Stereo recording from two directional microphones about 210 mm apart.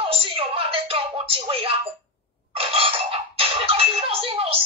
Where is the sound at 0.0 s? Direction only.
25° right (ahead or behind).